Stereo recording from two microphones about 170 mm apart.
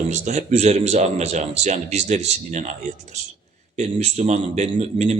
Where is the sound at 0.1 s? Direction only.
40° right (ahead or behind).